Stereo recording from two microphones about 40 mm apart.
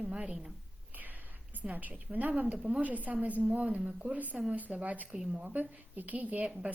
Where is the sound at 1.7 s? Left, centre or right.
Right.